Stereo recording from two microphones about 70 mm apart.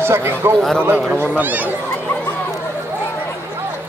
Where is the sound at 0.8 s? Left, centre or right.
Right.